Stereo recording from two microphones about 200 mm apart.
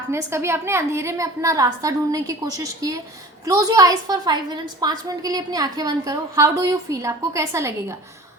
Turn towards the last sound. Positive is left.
turn(degrees=-15)  # may be behind; listen again after turning